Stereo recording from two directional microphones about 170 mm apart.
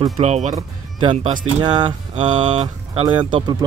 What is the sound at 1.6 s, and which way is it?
Speech, 25° right (ahead or behind).